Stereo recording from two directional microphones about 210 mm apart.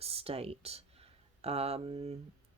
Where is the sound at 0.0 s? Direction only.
30° right (ahead or behind).